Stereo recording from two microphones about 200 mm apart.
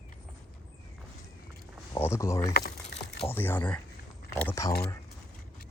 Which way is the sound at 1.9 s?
15° left (ahead or behind).